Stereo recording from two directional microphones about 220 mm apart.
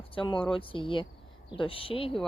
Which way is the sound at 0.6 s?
25° left (ahead or behind).